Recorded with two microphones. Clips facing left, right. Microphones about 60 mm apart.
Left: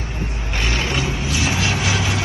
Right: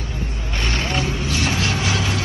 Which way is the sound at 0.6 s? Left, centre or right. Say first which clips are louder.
Left 2 dB; left.